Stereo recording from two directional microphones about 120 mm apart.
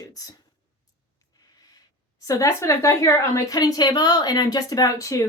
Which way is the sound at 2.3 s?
25° left (ahead or behind).